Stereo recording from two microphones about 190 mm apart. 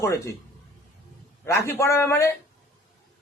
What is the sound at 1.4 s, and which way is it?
Speech, 15° left (ahead or behind).